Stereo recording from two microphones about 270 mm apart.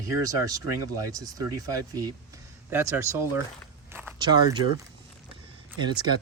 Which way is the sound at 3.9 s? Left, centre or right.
Centre.